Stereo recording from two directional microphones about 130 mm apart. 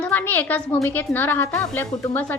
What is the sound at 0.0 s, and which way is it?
A woman's voice, 15° left (ahead or behind).